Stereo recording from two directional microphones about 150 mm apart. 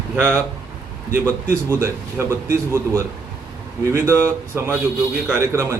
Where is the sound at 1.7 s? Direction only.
15° right (ahead or behind).